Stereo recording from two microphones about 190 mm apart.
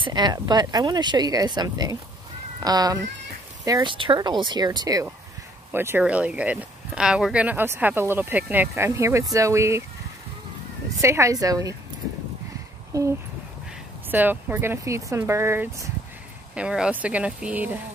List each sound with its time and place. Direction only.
0.0 s speech: 20° right (ahead or behind)
11.0 s speech: 15° right (ahead or behind)
12.9 s speech: 20° right (ahead or behind)
14.1 s speech: 10° right (ahead or behind)